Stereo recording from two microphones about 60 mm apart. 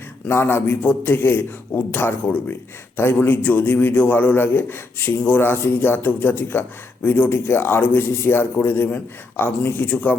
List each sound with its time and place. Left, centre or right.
0.3 s a man's voice: left